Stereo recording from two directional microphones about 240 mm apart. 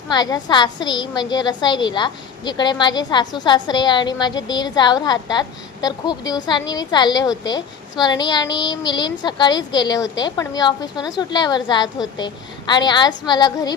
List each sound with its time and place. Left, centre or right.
0.1 s a woman's voice: centre